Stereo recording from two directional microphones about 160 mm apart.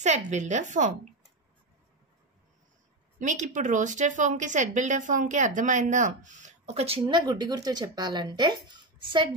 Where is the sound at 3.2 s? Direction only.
50° right (ahead or behind).